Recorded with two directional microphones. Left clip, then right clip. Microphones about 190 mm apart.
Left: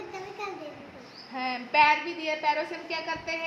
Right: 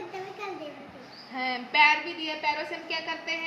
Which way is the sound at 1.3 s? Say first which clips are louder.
Left 1 dB; 25° left (ahead or behind).